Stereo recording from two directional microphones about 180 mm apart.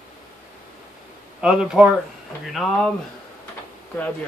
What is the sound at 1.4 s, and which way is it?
Speech, 5° right (ahead or behind).